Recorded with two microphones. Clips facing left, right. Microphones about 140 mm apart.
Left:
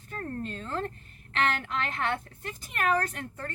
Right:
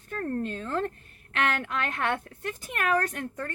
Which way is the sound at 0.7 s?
45° right (ahead or behind).